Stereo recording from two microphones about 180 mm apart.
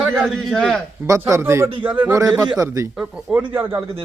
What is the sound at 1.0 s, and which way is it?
A man's voice, 15° right (ahead or behind).